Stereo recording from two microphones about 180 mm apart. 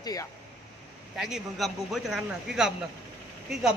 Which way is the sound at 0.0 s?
20° left (ahead or behind).